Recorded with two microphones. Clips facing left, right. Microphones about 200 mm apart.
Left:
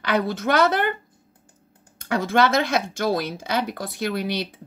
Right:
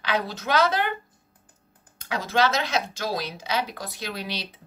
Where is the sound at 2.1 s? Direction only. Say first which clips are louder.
Left 4 dB; 55° left (ahead or behind).